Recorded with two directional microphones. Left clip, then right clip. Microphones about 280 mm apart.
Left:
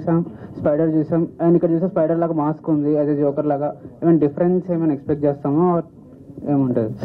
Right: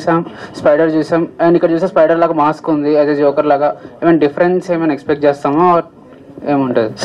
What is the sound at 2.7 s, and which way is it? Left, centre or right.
Speech, centre.